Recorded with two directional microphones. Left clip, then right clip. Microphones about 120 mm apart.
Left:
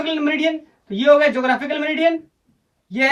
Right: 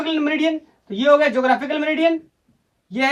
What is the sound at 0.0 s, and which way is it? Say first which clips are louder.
Speech: even; 25° right (ahead or behind).